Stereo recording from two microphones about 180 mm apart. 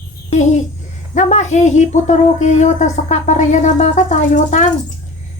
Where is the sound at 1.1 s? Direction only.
40° left (ahead or behind).